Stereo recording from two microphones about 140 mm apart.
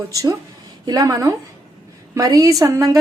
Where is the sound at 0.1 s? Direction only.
25° right (ahead or behind).